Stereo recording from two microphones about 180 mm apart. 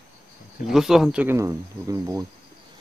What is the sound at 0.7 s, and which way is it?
Speech, centre (ahead or behind).